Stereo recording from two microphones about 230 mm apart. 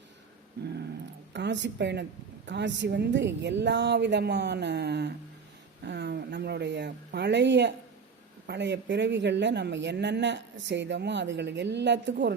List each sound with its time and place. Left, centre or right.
0.6 s dog: right
1.3 s a woman's voice: right